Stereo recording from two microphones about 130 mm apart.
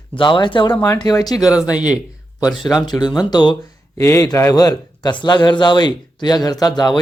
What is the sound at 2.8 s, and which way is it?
Speech, 35° left (ahead or behind).